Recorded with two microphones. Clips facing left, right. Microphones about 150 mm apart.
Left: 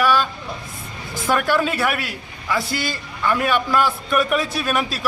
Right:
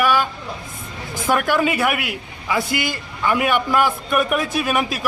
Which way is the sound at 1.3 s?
10° right (ahead or behind).